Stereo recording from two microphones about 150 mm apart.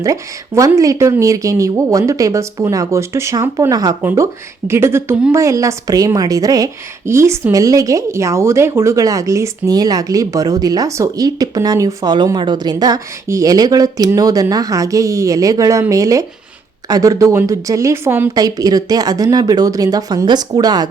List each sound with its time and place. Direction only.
0.0 s a woman's voice: 20° right (ahead or behind)